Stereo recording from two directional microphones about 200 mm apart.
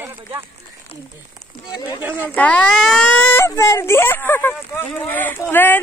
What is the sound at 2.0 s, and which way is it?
Speech, 10° right (ahead or behind).